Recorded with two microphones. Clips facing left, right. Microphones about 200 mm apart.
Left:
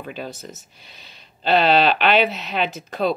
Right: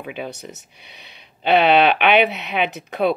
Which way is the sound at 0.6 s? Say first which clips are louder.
Right 2 dB; 65° right (ahead or behind).